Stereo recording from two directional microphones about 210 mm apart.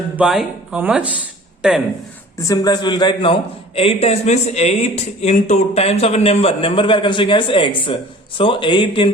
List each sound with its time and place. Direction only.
0.2 s speech: 5° right (ahead or behind)
2.4 s speech: 15° left (ahead or behind)